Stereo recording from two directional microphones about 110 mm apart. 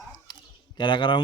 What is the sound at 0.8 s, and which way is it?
Speech, 45° left (ahead or behind).